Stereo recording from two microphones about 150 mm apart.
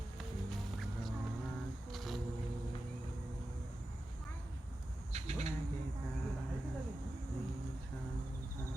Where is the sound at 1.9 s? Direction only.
Centre (ahead or behind).